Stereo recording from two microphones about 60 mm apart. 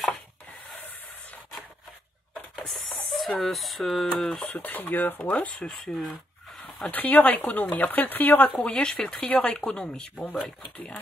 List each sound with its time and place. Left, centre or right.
3.1 s speech: centre
4.5 s speech: left
5.6 s speech: centre
6.9 s speech: left
8.6 s speech: centre